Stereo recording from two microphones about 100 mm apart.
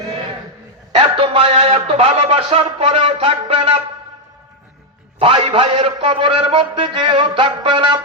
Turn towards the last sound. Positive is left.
turn(degrees=-55)  # may be behind; listen again after turning